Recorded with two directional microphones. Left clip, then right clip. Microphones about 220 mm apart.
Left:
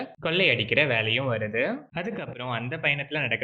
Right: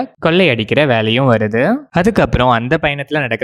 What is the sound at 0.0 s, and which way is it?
Speech, 55° right (ahead or behind).